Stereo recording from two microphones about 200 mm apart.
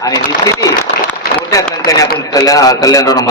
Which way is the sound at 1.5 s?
20° left (ahead or behind).